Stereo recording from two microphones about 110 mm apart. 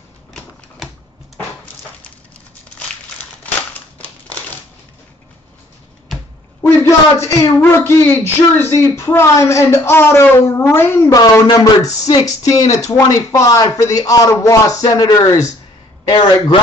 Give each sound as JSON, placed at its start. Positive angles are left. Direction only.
{"t": 6.6, "sound": "speech", "side_deg": 20}
{"t": 16.1, "sound": "a man's voice", "side_deg": 40}